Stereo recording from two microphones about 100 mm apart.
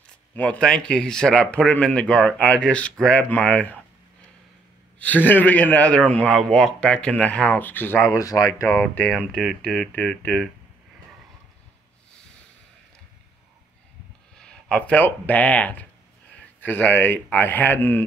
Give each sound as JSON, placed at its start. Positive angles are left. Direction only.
{"t": 0.0, "sound": "speech", "side_deg": 15}
{"t": 4.9, "sound": "speech", "side_deg": 15}
{"t": 8.1, "sound": "speech", "side_deg": 35}
{"t": 8.8, "sound": "speech", "side_deg": 15}
{"t": 9.3, "sound": "speech", "side_deg": 0}
{"t": 14.4, "sound": "speech", "side_deg": 10}